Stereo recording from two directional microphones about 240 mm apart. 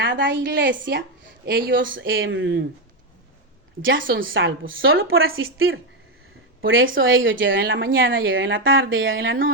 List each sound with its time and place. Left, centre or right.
0.0 s a woman's voice: right
4.0 s a woman's voice: right